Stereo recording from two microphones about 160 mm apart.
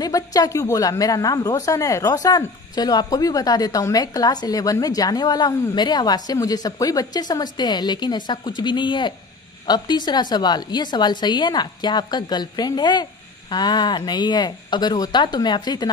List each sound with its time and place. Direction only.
0.0 s a woman's voice: 25° left (ahead or behind)